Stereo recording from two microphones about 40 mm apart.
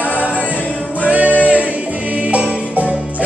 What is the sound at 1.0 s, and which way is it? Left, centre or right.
Music, right.